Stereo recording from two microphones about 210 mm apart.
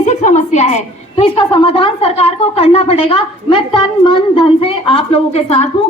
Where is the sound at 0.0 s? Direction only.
35° left (ahead or behind).